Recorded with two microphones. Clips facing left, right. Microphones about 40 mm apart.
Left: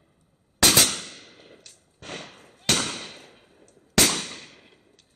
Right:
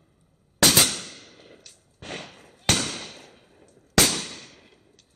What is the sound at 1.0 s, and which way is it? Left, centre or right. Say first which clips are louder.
Fireworks: even; centre.